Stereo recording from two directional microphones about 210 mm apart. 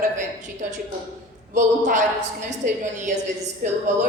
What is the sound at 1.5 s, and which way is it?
Speech, 35° right (ahead or behind).